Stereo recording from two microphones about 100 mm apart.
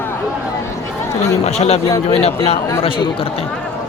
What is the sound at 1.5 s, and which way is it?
Speech, 90° left.